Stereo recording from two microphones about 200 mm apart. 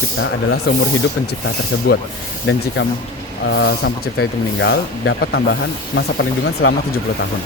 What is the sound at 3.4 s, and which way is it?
Speech, 60° left (ahead or behind).